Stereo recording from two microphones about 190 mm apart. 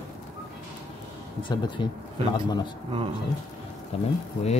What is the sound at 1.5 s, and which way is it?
Speech, 25° left (ahead or behind).